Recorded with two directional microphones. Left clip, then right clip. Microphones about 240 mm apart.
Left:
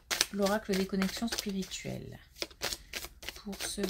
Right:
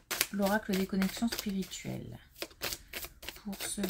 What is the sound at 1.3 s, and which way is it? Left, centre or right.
Shuffling cards, centre.